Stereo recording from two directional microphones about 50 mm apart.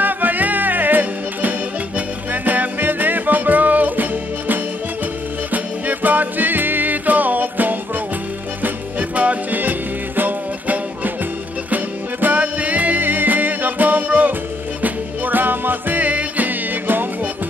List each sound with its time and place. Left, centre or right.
0.0 s music: right